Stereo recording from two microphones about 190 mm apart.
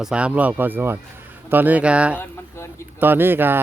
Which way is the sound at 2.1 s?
15° left (ahead or behind).